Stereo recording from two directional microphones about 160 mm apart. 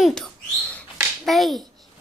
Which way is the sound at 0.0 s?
Centre (ahead or behind).